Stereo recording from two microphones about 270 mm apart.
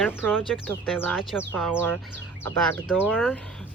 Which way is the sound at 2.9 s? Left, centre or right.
Centre.